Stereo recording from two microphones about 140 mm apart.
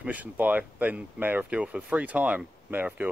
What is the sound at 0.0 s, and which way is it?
Speech, 10° right (ahead or behind).